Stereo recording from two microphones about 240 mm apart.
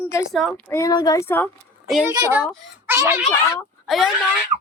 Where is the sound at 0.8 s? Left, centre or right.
Centre.